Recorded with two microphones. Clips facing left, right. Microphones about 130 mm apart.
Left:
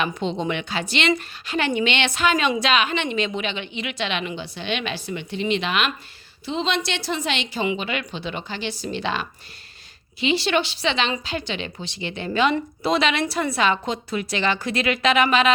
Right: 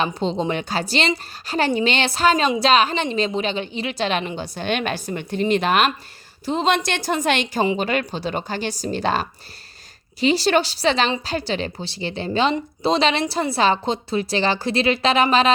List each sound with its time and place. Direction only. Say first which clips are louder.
0.0 s a woman's voice: right 3 dB; 35° right (ahead or behind)